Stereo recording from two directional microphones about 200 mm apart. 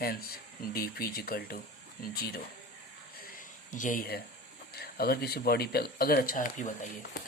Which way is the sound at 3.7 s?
40° left (ahead or behind).